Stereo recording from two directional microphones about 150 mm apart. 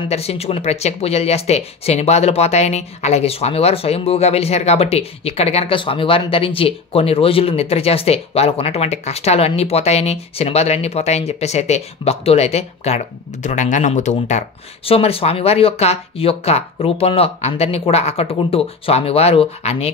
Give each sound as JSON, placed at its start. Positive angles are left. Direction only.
{"t": 0.1, "sound": "speech", "side_deg": 45}
{"t": 14.9, "sound": "speech", "side_deg": 40}